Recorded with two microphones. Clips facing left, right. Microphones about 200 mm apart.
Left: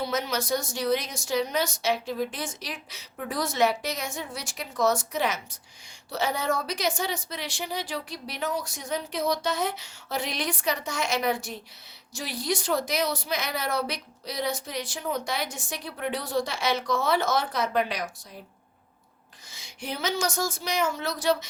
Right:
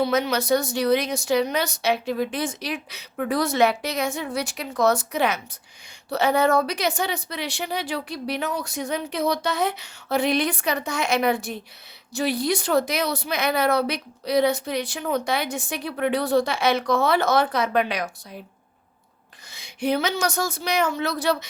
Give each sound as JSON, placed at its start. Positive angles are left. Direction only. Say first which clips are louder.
{"t": 0.0, "sound": "speech", "louder": "right 7 dB", "side_deg": -65}
{"t": 19.5, "sound": "speech", "louder": "right 12 dB", "side_deg": -65}